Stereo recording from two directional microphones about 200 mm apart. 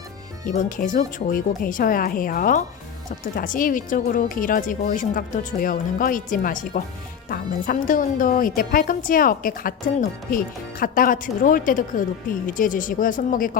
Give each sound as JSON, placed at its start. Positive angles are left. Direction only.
{"t": 0.4, "sound": "speech", "side_deg": 40}